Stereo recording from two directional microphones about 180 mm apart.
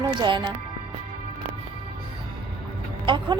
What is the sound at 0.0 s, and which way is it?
Speech, 25° right (ahead or behind).